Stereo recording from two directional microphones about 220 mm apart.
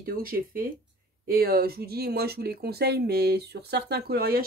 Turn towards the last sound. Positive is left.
turn(degrees=-45)  # may be behind; listen again after turning